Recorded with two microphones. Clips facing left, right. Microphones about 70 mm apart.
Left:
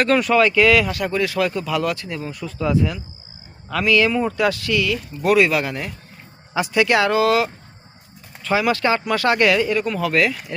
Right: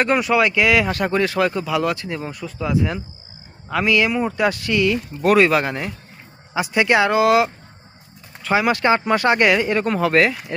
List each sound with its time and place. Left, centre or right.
0.0 s speech: centre
0.9 s speech: right
2.4 s speech: centre
3.7 s speech: centre